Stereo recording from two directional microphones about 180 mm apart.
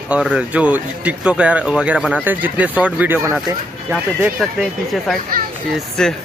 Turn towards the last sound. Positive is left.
turn(degrees=5)  # may be behind; listen again after turning